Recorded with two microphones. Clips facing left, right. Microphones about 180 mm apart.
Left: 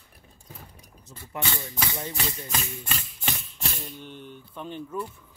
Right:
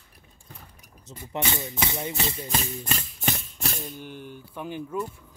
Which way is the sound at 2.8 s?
45° right (ahead or behind).